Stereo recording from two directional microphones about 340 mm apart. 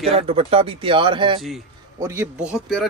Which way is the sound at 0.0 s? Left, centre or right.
Centre.